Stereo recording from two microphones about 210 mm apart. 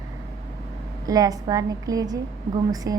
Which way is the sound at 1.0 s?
15° right (ahead or behind).